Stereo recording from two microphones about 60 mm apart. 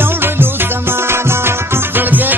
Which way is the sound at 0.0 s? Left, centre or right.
Right.